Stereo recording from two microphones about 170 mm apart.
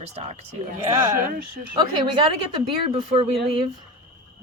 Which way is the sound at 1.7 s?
30° right (ahead or behind).